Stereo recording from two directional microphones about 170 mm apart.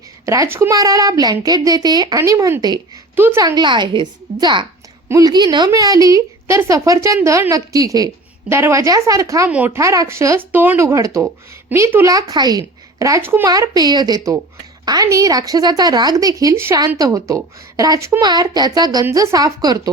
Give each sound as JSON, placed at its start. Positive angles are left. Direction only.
{"t": 0.3, "sound": "a woman's voice", "side_deg": -15}
{"t": 3.2, "sound": "speech", "side_deg": -10}
{"t": 3.4, "sound": "a woman's voice", "side_deg": -25}